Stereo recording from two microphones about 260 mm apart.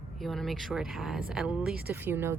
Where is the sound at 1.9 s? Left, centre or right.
Centre.